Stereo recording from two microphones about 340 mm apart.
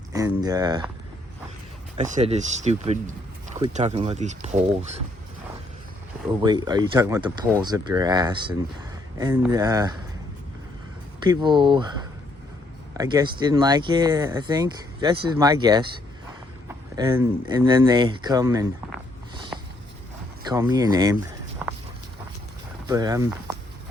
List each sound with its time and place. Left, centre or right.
0.1 s speech: centre
2.0 s speech: centre
6.2 s speech: centre
11.2 s speech: centre
13.0 s speech: centre
20.4 s speech: centre
21.6 s walk: centre
22.9 s speech: centre